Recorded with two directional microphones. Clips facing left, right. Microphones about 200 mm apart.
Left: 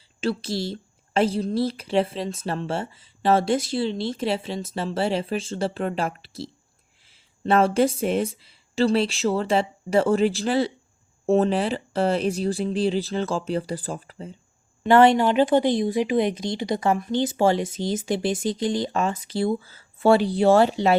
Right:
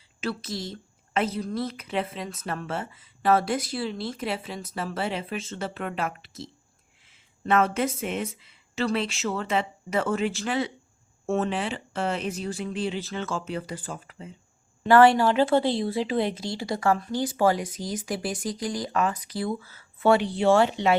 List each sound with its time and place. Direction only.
0.2 s a woman's voice: 30° left (ahead or behind)
14.8 s a woman's voice: 20° left (ahead or behind)